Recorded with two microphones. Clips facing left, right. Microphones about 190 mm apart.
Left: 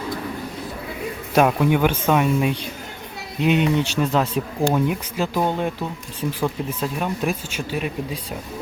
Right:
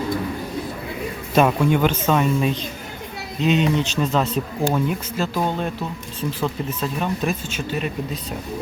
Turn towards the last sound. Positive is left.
turn(degrees=10)  # may be behind; listen again after turning